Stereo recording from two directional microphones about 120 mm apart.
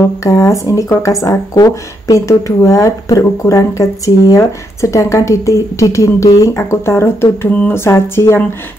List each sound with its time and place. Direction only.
0.2 s speech: 30° left (ahead or behind)